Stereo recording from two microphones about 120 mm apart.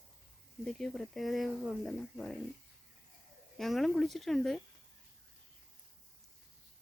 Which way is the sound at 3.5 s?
Centre (ahead or behind).